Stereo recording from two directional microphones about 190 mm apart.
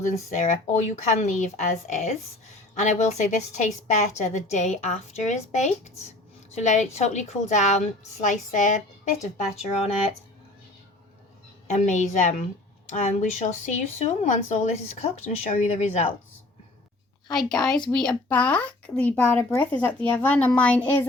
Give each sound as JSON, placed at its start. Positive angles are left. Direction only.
{"t": 0.3, "sound": "a woman's voice", "side_deg": 40}
{"t": 11.7, "sound": "speech", "side_deg": 35}
{"t": 17.2, "sound": "a woman's voice", "side_deg": 5}